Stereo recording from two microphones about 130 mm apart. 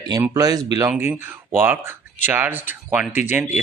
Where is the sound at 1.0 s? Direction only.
20° right (ahead or behind).